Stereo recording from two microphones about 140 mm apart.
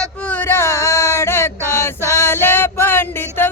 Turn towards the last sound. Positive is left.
turn(degrees=15)  # may be behind; listen again after turning